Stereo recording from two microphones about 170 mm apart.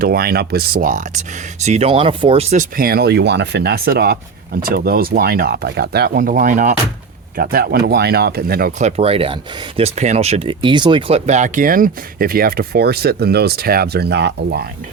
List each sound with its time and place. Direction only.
0.0 s speech: 65° right (ahead or behind); by 1.2 s 50° right (ahead or behind)
1.6 s speech: 40° right (ahead or behind)
2.7 s speech: 65° right (ahead or behind); by 6.7 s 50° right (ahead or behind)
7.3 s speech: 65° right (ahead or behind)
8.8 s speech: 35° right (ahead or behind)
11.3 s speech: 45° right (ahead or behind); by 14.6 s 85° right